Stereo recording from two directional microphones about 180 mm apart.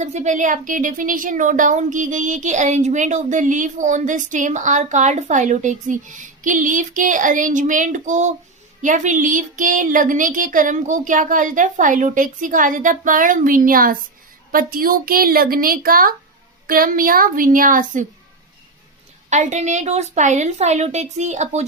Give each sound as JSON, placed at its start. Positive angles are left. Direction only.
{"t": 0.0, "sound": "speech", "side_deg": -40}
{"t": 19.3, "sound": "a woman's voice", "side_deg": -40}